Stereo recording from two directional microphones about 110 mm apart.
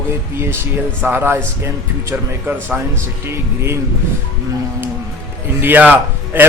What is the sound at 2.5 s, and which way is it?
Speech, 15° right (ahead or behind).